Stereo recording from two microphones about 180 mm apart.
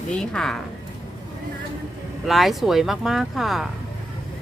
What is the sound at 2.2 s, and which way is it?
Speech, centre (ahead or behind).